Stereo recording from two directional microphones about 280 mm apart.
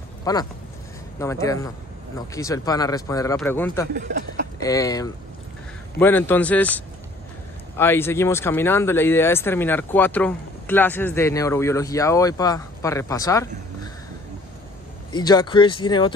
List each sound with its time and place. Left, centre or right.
0.2 s speech: centre
3.9 s speech: right
4.6 s a man's voice: centre
15.1 s speech: centre